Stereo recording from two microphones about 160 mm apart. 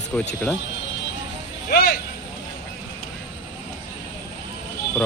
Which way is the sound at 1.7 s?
85° left.